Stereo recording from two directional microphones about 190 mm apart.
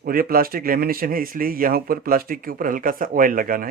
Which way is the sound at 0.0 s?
50° right (ahead or behind).